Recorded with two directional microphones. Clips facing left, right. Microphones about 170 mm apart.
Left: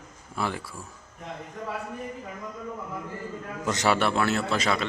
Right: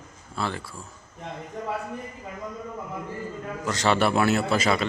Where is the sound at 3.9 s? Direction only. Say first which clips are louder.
Right 5 dB; 5° right (ahead or behind).